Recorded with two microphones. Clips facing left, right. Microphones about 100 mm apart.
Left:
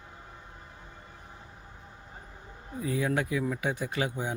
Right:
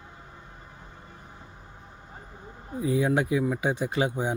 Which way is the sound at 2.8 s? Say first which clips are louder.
Right 5 dB; 20° right (ahead or behind).